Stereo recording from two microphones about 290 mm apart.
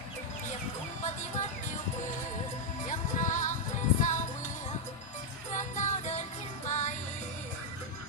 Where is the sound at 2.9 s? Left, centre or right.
Left.